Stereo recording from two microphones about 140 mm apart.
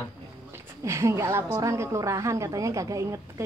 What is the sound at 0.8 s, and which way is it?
A woman's voice, 20° right (ahead or behind).